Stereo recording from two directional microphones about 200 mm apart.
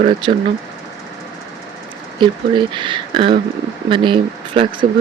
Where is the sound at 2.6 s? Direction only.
25° right (ahead or behind).